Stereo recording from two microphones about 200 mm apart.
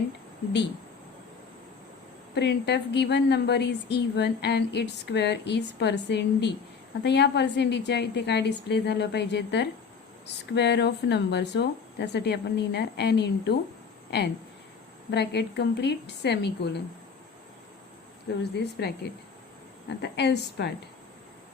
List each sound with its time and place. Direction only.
2.3 s a woman's voice: 60° left (ahead or behind)
18.5 s a woman's voice: 55° left (ahead or behind)
20.0 s a woman's voice: 55° left (ahead or behind)